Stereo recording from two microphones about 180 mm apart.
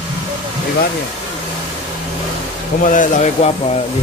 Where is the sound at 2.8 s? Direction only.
45° left (ahead or behind).